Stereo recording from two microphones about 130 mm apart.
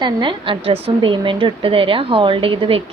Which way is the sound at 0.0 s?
40° right (ahead or behind).